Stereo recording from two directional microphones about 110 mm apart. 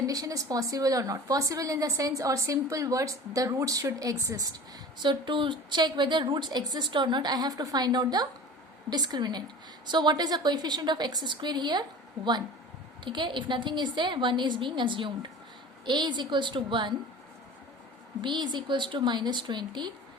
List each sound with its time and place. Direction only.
0.1 s a woman's voice: 30° right (ahead or behind)
5.0 s a woman's voice: 45° right (ahead or behind)
18.2 s a woman's voice: 45° right (ahead or behind)